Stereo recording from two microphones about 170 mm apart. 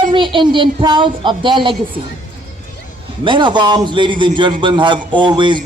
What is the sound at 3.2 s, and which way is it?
A woman's voice, 25° right (ahead or behind).